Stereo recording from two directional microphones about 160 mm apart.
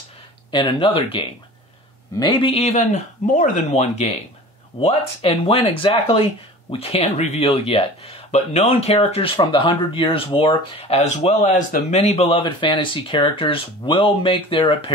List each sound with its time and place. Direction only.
0.5 s speech: 30° left (ahead or behind)